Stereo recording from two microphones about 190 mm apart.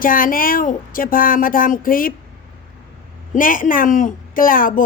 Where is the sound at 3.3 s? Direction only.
45° left (ahead or behind).